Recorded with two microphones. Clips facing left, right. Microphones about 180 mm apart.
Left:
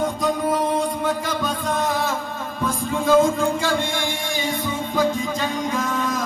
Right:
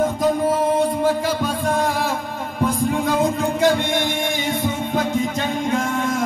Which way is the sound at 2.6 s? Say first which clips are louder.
Right 4 dB; 15° right (ahead or behind).